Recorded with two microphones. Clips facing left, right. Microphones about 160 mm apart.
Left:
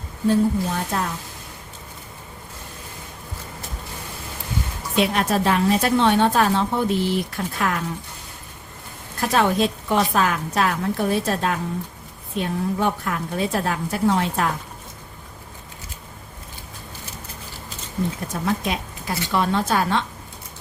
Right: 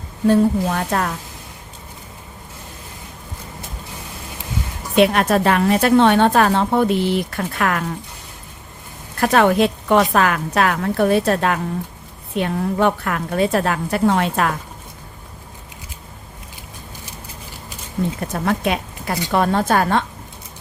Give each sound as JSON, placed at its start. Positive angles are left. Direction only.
{"t": 0.3, "sound": "a woman's voice", "side_deg": -70}
{"t": 4.9, "sound": "a woman's voice", "side_deg": -65}
{"t": 9.2, "sound": "a woman's voice", "side_deg": -65}
{"t": 18.4, "sound": "speech", "side_deg": -65}
{"t": 19.3, "sound": "a woman's voice", "side_deg": -50}